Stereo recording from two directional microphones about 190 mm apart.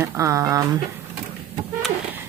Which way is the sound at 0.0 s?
15° right (ahead or behind).